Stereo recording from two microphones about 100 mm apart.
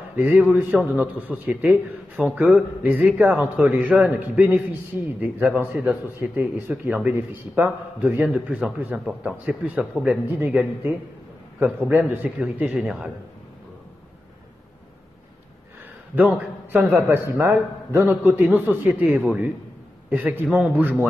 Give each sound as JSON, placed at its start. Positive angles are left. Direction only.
{"t": 0.1, "sound": "a man's voice", "side_deg": -15}
{"t": 16.3, "sound": "a man's voice", "side_deg": -20}